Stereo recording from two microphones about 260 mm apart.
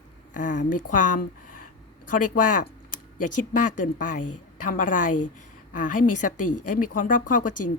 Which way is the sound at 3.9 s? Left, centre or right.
Left.